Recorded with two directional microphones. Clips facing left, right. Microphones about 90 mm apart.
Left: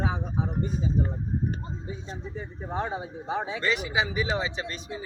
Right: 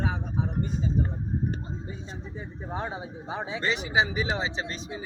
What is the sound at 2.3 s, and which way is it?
Speech, 10° right (ahead or behind).